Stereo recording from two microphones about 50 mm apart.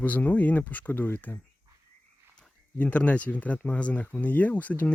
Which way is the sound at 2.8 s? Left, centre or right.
Left.